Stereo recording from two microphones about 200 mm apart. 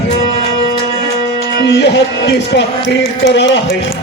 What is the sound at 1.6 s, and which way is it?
A man's voice, 60° left (ahead or behind).